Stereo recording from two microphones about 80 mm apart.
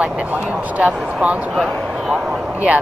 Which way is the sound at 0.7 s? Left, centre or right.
Centre.